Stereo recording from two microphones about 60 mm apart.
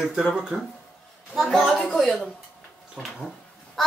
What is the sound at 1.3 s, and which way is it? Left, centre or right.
A child's voice, centre.